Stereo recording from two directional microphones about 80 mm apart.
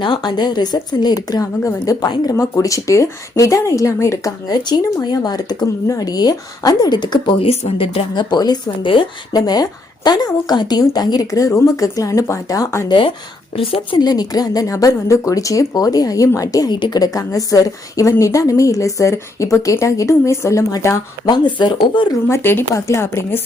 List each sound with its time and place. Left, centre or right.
0.0 s speech: left
4.3 s speech: left
9.3 s speech: left
12.9 s speech: left
14.1 s speech: left
16.6 s speech: left
17.0 s a woman's voice: left
21.2 s speech: left
22.3 s a woman's voice: left